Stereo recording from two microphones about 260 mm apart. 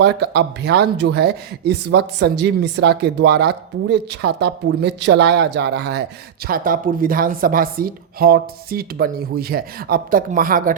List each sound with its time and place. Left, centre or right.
0.0 s speech: right